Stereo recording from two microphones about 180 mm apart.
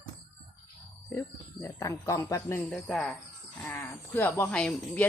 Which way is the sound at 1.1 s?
15° left (ahead or behind).